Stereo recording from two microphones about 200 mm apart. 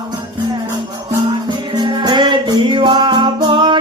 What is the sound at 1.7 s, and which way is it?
Music, 20° right (ahead or behind).